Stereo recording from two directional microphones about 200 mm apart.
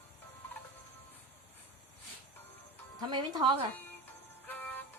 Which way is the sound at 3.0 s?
20° right (ahead or behind).